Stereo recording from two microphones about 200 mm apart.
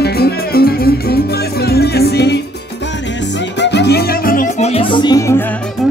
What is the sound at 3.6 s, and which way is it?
Music, 60° left (ahead or behind).